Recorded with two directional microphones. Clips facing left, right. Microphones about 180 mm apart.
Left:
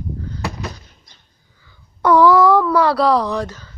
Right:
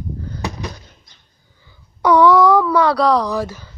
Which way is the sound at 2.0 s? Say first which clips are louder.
Even; centre (ahead or behind).